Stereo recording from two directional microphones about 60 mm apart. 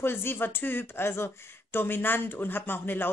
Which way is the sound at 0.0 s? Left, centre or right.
Left.